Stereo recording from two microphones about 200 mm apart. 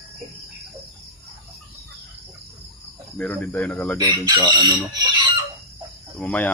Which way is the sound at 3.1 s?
5° left (ahead or behind).